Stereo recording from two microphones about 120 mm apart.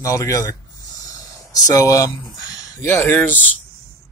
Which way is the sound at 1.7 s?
30° left (ahead or behind).